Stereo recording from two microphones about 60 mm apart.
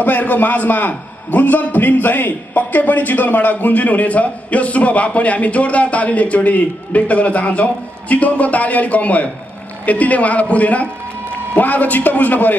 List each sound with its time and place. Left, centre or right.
0.0 s a man's voice: left